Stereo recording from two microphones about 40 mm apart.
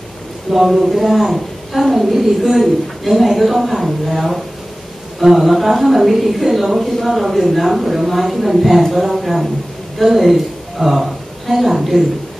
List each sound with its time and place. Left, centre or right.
0.5 s a woman's voice: centre